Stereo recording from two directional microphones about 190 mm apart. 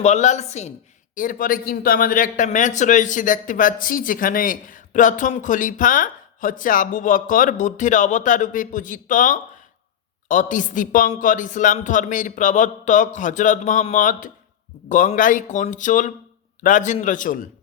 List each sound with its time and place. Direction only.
0.0 s a man's voice: 35° left (ahead or behind)